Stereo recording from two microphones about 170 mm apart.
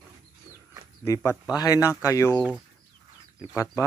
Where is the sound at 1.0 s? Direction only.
15° left (ahead or behind).